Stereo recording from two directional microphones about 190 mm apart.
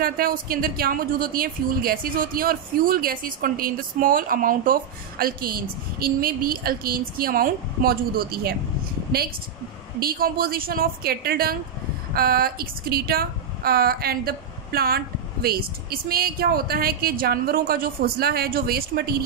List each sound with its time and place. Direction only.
0.0 s a woman's voice: 50° right (ahead or behind)
9.9 s a woman's voice: 50° right (ahead or behind)